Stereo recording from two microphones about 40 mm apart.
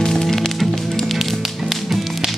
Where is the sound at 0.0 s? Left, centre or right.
Centre.